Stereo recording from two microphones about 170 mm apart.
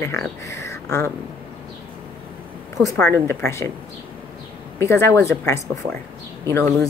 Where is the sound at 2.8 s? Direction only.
20° left (ahead or behind).